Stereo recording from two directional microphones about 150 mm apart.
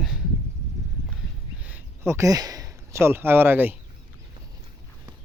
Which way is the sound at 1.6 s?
15° right (ahead or behind).